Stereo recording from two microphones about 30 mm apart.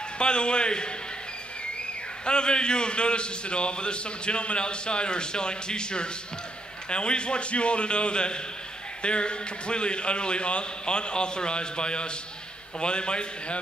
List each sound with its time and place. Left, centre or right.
0.2 s a man's voice: left
2.2 s a man's voice: left